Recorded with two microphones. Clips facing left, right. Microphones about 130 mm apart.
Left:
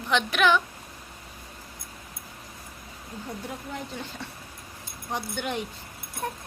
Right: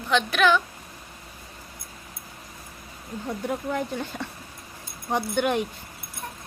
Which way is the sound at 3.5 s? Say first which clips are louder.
Right 8 dB; 65° right (ahead or behind).